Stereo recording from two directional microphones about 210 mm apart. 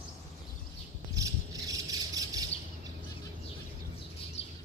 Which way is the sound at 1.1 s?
15° right (ahead or behind).